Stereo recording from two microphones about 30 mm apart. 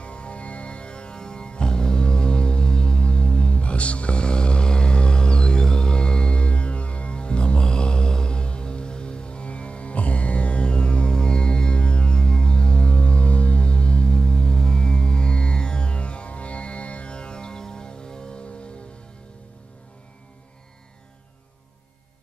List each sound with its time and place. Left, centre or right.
0.0 s music: left